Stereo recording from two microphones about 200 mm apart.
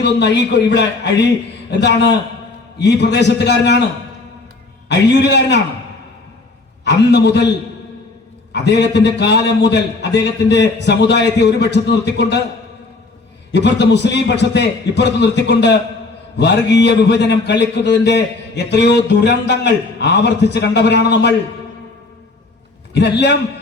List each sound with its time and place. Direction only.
0.0 s a man's voice: 60° left (ahead or behind)
1.8 s a man's voice: 60° left (ahead or behind)
4.9 s a man's voice: 60° left (ahead or behind)
6.8 s a man's voice: 60° left (ahead or behind)
8.6 s a man's voice: 60° left (ahead or behind)
13.5 s a man's voice: 60° left (ahead or behind)
23.0 s a man's voice: 60° left (ahead or behind)